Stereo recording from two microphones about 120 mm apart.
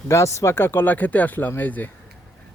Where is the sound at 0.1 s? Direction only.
25° left (ahead or behind).